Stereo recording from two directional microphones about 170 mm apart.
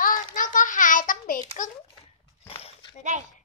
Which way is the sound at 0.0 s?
50° left (ahead or behind).